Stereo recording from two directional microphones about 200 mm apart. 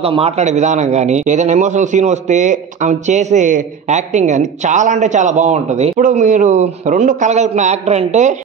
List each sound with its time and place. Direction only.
0.0 s a man's voice: 30° right (ahead or behind)